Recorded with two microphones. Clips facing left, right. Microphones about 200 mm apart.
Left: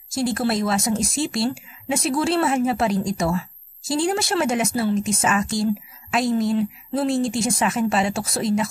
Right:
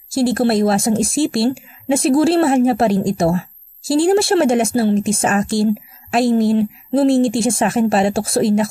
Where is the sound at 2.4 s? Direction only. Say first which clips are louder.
Right 7 dB; 55° right (ahead or behind).